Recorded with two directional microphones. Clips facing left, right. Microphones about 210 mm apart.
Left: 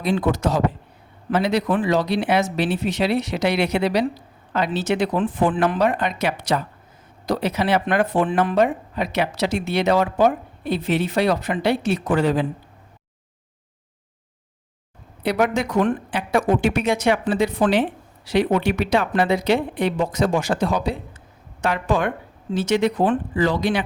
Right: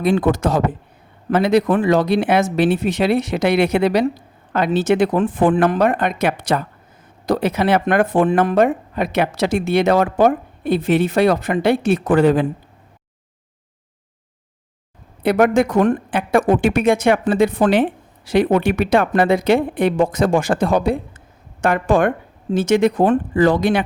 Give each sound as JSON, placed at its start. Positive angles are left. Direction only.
{"t": 0.0, "sound": "speech", "side_deg": -50}
{"t": 15.2, "sound": "speech", "side_deg": -50}